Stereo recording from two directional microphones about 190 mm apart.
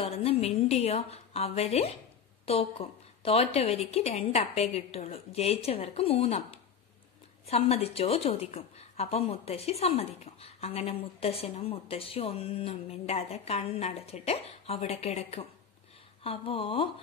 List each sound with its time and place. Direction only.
0.0 s a woman's voice: 30° left (ahead or behind)